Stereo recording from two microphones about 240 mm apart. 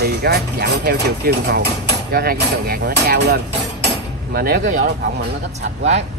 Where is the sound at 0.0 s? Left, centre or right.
Right.